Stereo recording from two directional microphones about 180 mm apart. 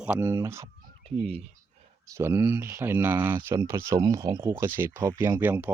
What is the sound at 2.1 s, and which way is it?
Speech, 15° right (ahead or behind).